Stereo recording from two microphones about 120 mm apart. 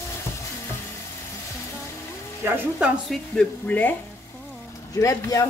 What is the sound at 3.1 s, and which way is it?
Speech, 10° left (ahead or behind).